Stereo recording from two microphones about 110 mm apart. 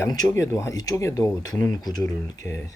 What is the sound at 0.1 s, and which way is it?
Speech, 30° left (ahead or behind).